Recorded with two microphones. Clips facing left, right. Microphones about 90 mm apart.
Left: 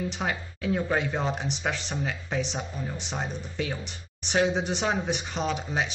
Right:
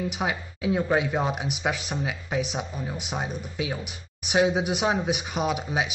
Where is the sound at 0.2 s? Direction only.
10° right (ahead or behind).